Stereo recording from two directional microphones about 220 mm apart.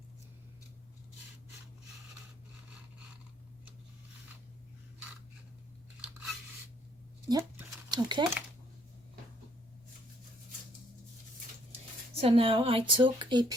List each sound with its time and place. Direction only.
7.3 s a sound: 10° right (ahead or behind)
7.9 s speech: 20° right (ahead or behind)
12.1 s speech: 25° right (ahead or behind)